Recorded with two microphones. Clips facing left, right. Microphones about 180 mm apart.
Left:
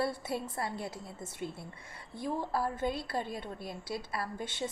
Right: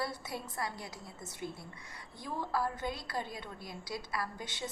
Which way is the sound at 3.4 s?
55° left (ahead or behind).